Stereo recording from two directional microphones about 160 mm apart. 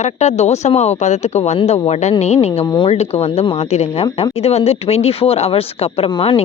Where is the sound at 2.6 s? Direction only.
25° left (ahead or behind).